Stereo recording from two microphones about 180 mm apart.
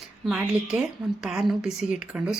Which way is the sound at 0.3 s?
5° right (ahead or behind).